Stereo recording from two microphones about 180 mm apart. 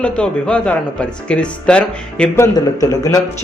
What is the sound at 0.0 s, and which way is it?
Speech, 5° left (ahead or behind).